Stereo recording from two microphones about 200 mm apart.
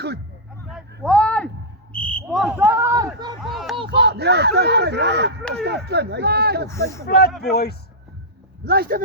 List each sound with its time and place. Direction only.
1.0 s a sound: 5° left (ahead or behind); by 3.1 s 15° right (ahead or behind)
3.4 s a sound: centre (ahead or behind)
3.8 s speech: 60° right (ahead or behind)
6.7 s speech: 15° left (ahead or behind)
7.3 s a man's voice: centre (ahead or behind)
7.5 s speech: 50° left (ahead or behind)
8.6 s speech: 50° right (ahead or behind)